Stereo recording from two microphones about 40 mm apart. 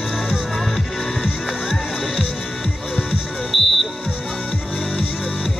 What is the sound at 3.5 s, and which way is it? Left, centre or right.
Music, centre.